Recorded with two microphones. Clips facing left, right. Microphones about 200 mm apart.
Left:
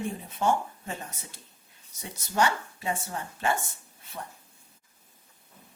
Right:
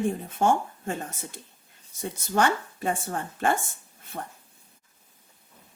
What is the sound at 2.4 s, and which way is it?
Speech, 50° right (ahead or behind).